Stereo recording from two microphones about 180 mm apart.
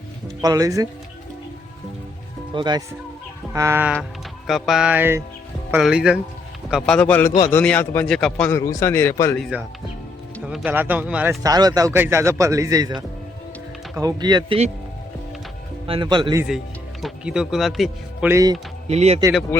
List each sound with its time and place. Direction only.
0.4 s speech: 20° right (ahead or behind)
2.6 s a man's voice: 25° right (ahead or behind)
4.4 s a man's voice: centre (ahead or behind)
9.4 s a man's voice: 5° right (ahead or behind)
11.4 s a man's voice: 20° right (ahead or behind)
13.9 s speech: 20° right (ahead or behind)
15.9 s speech: 25° right (ahead or behind)
17.0 s speech: 5° right (ahead or behind)
18.3 s a man's voice: 15° right (ahead or behind)
18.9 s speech: 35° right (ahead or behind)
19.5 s a man's voice: 10° left (ahead or behind)